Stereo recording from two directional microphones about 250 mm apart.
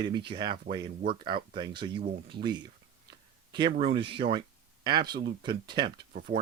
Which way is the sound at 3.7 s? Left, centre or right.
Right.